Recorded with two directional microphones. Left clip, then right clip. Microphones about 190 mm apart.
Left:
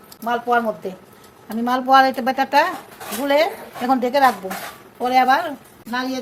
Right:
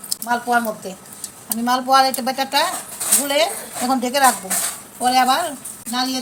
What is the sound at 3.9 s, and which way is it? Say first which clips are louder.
Speech: left 1 dB; 45° left (ahead or behind).